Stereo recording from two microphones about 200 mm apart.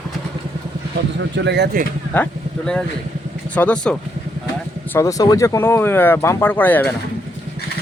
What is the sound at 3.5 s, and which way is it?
Speech, 5° left (ahead or behind).